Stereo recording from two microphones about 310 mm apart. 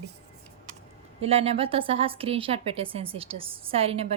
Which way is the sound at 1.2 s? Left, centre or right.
Centre.